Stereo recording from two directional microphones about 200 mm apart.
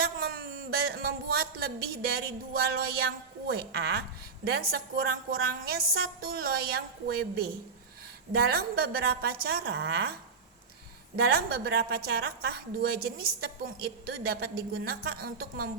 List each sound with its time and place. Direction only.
0.0 s a sound: 50° right (ahead or behind)
2.5 s a woman's voice: 50° right (ahead or behind)
11.3 s a woman's voice: 50° right (ahead or behind)